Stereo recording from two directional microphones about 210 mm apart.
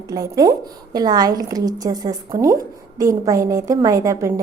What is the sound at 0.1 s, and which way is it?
A woman's voice, 15° right (ahead or behind).